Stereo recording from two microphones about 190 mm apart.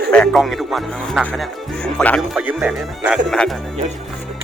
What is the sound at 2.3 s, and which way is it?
Speech, 5° right (ahead or behind).